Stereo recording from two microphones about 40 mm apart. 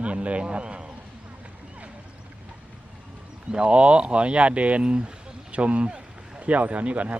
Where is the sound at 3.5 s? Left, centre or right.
Right.